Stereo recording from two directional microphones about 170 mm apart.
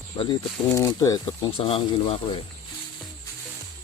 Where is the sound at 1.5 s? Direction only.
30° left (ahead or behind).